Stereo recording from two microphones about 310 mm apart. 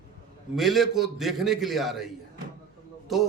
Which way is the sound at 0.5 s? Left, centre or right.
Centre.